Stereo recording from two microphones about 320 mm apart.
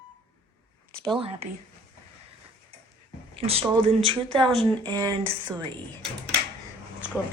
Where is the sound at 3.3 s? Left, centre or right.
Centre.